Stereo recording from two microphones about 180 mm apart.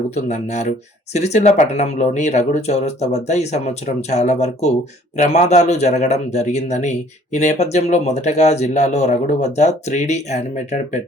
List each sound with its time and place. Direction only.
0.1 s speech: 40° left (ahead or behind)